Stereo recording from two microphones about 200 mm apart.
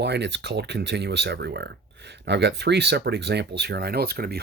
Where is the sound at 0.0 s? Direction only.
55° right (ahead or behind).